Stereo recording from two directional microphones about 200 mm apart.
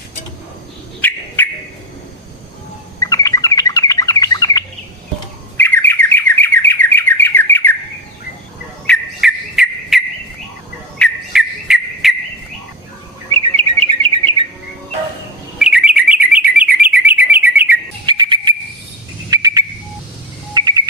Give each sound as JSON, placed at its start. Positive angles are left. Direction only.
{"t": 1.0, "sound": "bird", "side_deg": 10}
{"t": 3.0, "sound": "bird", "side_deg": 15}
{"t": 8.9, "sound": "bird", "side_deg": 0}
{"t": 13.3, "sound": "chirp", "side_deg": -25}
{"t": 15.5, "sound": "bird", "side_deg": -5}
{"t": 18.0, "sound": "bird", "side_deg": -20}
{"t": 20.5, "sound": "music", "side_deg": -20}